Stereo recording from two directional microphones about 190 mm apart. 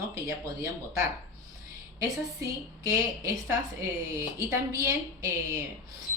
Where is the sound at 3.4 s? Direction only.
15° right (ahead or behind).